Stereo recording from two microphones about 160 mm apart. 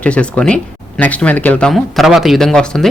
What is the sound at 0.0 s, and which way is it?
A man's voice, 5° left (ahead or behind).